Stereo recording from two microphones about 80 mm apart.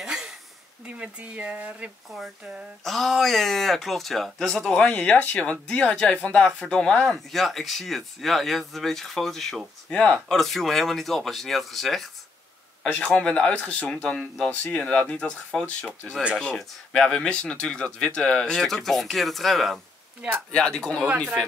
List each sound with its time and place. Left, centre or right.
0.0 s a sound: centre
0.8 s speech: centre
2.0 s speech: centre
4.8 s speech: centre
18.5 s speech: centre